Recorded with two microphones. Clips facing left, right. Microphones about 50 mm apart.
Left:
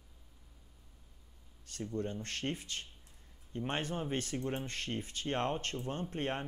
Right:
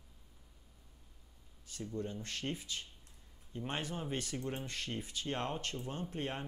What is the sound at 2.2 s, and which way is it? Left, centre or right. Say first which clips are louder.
Speech: left 2 dB; left.